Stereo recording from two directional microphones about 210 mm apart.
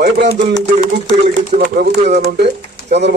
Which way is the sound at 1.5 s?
40° right (ahead or behind).